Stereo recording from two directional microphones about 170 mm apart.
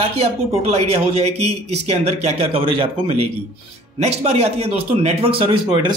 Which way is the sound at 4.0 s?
40° right (ahead or behind).